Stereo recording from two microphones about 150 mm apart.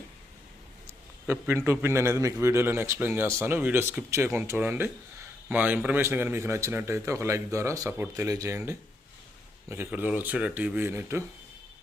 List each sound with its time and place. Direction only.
0.9 s a man's voice: 15° right (ahead or behind)